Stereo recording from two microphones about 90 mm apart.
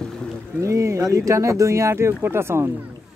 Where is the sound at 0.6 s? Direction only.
35° right (ahead or behind).